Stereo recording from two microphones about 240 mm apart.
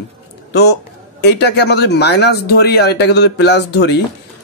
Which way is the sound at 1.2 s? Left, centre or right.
Left.